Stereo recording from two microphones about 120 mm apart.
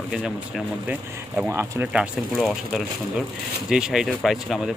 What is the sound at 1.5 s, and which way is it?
Speech, 15° right (ahead or behind).